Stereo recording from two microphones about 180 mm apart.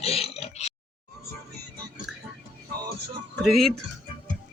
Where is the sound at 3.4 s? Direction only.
Centre (ahead or behind).